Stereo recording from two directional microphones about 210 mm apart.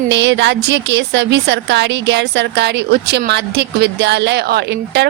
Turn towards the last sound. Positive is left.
turn(degrees=-55)  # may be behind; listen again after turning